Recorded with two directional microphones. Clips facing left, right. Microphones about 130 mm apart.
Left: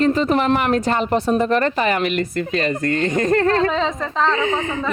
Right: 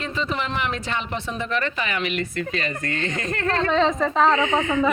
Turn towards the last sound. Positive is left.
turn(degrees=35)  # may be behind; listen again after turning